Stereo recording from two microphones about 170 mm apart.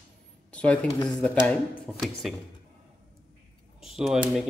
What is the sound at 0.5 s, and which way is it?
Speech, 5° left (ahead or behind).